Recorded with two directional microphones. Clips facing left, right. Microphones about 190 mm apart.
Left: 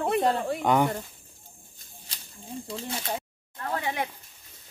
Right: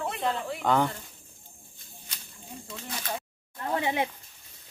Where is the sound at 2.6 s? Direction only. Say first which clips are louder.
Left 3 dB; 30° left (ahead or behind).